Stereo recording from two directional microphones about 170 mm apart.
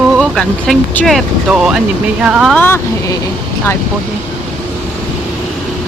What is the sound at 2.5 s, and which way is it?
Speech, 10° left (ahead or behind).